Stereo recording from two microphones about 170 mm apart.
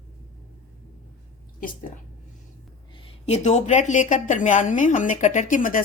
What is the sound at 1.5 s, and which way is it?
Speech, 55° left (ahead or behind).